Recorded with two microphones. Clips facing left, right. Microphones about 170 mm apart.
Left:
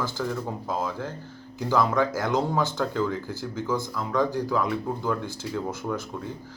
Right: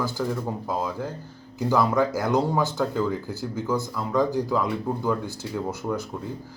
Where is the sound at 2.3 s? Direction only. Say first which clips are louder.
Right 2 dB; 15° right (ahead or behind).